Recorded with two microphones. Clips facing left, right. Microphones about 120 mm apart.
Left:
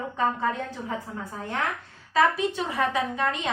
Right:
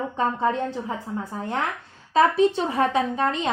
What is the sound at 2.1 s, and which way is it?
Speech, 30° right (ahead or behind).